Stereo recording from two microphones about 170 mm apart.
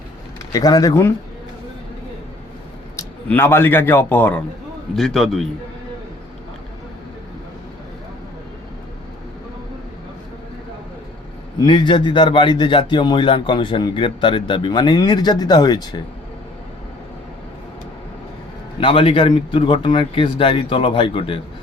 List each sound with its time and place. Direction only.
0.5 s a man's voice: 20° left (ahead or behind)
2.9 s speech: 15° left (ahead or behind)
4.9 s a man's voice: centre (ahead or behind)
11.6 s a man's voice: 25° left (ahead or behind)
18.8 s speech: 30° left (ahead or behind)